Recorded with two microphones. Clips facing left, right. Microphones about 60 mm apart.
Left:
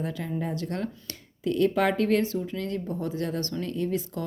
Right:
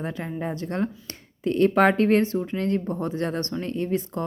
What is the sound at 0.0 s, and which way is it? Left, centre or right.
Speech, right.